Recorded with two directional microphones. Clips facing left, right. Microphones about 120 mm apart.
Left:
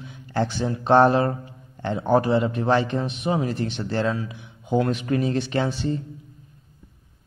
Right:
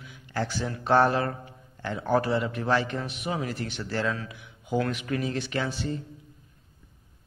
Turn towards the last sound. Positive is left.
turn(degrees=30)  # may be behind; listen again after turning